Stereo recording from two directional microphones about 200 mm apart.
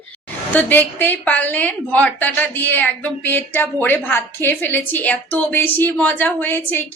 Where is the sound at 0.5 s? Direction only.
10° left (ahead or behind).